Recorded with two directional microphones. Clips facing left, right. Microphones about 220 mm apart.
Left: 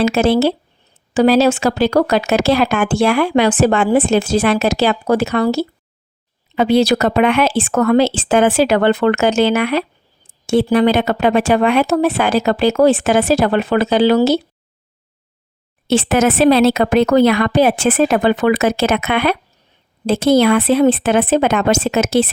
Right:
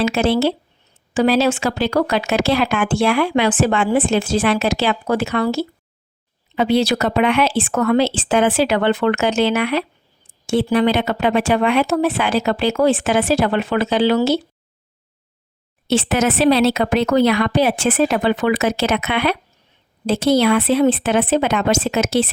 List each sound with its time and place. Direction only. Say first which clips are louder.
0.0 s a woman's voice: left 3 dB; 40° left (ahead or behind)
15.9 s a woman's voice: left 3 dB; 50° left (ahead or behind)